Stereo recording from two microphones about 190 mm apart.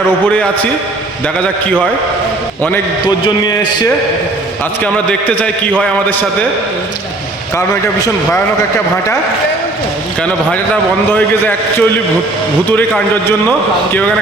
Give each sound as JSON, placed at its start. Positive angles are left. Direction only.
{"t": 7.5, "sound": "a man's voice", "side_deg": 15}
{"t": 11.1, "sound": "a man's voice", "side_deg": 5}